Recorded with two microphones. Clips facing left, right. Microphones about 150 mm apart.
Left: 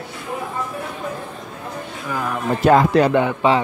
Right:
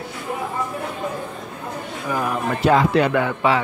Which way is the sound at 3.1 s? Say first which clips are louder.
Left 3 dB; 25° left (ahead or behind).